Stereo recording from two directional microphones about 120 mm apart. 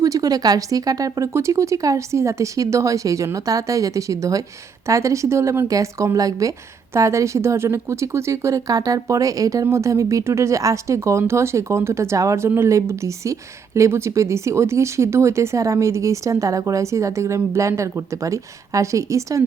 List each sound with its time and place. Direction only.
0.0 s speech: 30° right (ahead or behind)